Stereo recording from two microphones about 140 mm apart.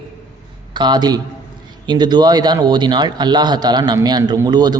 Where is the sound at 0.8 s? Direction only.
30° right (ahead or behind).